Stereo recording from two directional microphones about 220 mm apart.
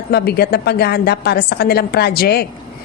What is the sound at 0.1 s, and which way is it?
A woman's voice, 45° left (ahead or behind).